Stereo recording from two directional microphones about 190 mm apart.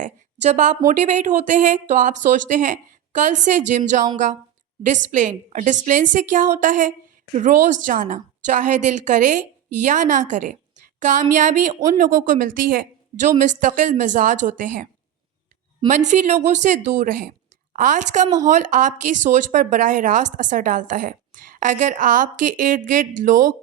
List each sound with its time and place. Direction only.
0.0 s a woman's voice: 40° right (ahead or behind)
15.9 s a woman's voice: 40° right (ahead or behind)